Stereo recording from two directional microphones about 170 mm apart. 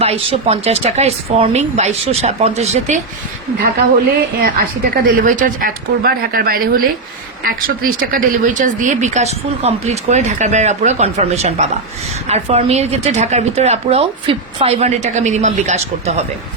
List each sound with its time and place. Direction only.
0.0 s a woman's voice: 35° right (ahead or behind)
4.4 s a woman's voice: 55° right (ahead or behind)